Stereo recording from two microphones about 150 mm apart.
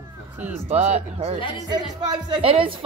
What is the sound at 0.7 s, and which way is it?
A woman's voice, 45° right (ahead or behind).